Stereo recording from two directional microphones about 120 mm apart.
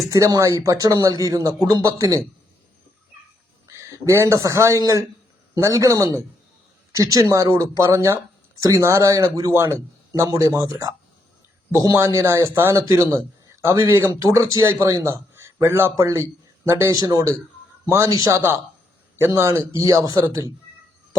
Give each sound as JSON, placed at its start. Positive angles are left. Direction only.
{"t": 0.1, "sound": "speech", "side_deg": -30}
{"t": 3.7, "sound": "a sound", "side_deg": -25}
{"t": 4.4, "sound": "speech", "side_deg": -25}